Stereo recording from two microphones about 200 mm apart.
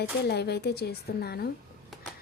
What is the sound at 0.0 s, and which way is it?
Speech, 55° left (ahead or behind).